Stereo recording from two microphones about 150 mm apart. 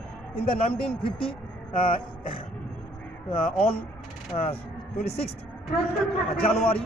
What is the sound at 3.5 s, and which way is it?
Speech, 40° left (ahead or behind).